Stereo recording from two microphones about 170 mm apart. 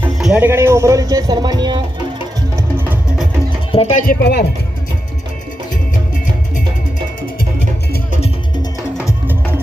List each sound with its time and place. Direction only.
0.0 s speech: 5° right (ahead or behind); by 1.8 s 25° right (ahead or behind)
2.6 s music: 10° right (ahead or behind)
3.7 s speech: 40° left (ahead or behind); by 4.4 s 70° left (ahead or behind)
9.2 s music: 10° right (ahead or behind)